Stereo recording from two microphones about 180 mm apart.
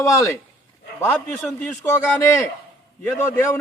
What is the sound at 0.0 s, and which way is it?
A man's voice, 15° left (ahead or behind).